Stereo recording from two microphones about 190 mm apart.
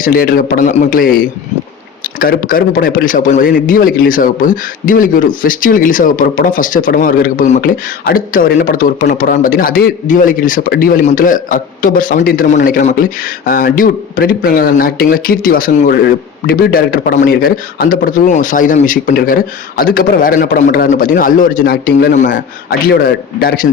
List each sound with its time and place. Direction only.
0.0 s a man's voice: 50° left (ahead or behind)